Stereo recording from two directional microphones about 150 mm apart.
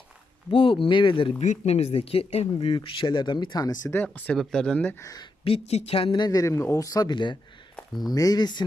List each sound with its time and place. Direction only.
0.5 s speech: 35° left (ahead or behind)
1.4 s speech: 45° left (ahead or behind); by 3.8 s 25° left (ahead or behind)
3.8 s speech: 15° left (ahead or behind)
5.0 s speech: 25° left (ahead or behind)
5.5 s speech: 45° left (ahead or behind)